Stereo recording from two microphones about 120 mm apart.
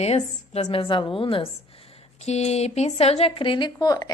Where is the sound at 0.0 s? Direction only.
60° left (ahead or behind).